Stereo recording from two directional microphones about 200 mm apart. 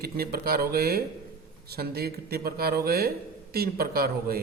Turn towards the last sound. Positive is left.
turn(degrees=-50)  # may be behind; listen again after turning